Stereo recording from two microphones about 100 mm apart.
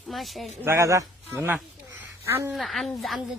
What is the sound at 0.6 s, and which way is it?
Speech, 30° right (ahead or behind).